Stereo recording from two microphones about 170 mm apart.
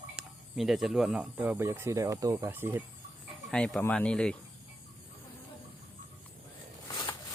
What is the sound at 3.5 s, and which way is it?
Speech, 5° left (ahead or behind).